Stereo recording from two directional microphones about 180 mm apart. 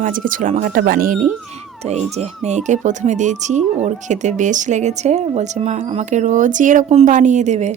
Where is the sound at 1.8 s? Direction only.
35° right (ahead or behind).